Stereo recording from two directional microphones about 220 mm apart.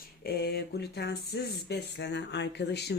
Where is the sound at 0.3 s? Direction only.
45° left (ahead or behind).